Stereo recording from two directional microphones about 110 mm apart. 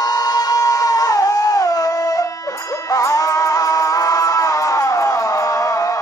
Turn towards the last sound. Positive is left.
turn(degrees=30)  # may be behind; listen again after turning